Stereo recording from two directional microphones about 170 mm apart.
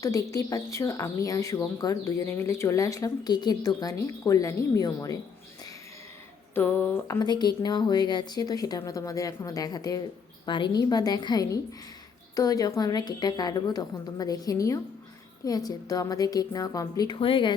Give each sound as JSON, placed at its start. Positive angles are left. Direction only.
{"t": 0.0, "sound": "speech", "side_deg": 20}
{"t": 6.5, "sound": "speech", "side_deg": 10}
{"t": 7.2, "sound": "speech", "side_deg": 25}